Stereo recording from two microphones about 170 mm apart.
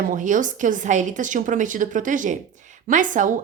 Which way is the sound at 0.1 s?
50° right (ahead or behind).